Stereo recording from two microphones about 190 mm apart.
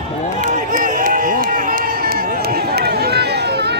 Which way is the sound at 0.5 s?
45° right (ahead or behind).